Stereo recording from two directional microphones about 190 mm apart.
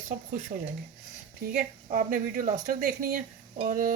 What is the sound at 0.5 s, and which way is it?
Speech, 40° right (ahead or behind).